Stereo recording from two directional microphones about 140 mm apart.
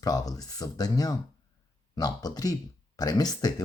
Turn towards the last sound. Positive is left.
turn(degrees=30)  # may be behind; listen again after turning